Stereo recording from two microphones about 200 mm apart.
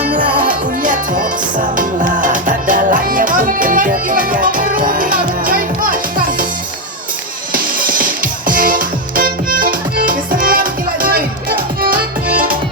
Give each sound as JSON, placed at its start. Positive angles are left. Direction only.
{"t": 0.3, "sound": "music", "side_deg": -45}
{"t": 7.5, "sound": "music", "side_deg": -45}